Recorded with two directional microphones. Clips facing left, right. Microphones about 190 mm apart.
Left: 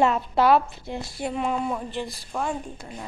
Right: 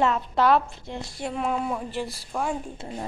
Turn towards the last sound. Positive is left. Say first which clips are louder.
# right 4 dB
turn(degrees=-30)  # may be behind; listen again after turning